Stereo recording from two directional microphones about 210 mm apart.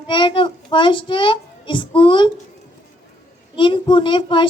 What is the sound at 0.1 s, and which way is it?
A child's voice, 25° left (ahead or behind).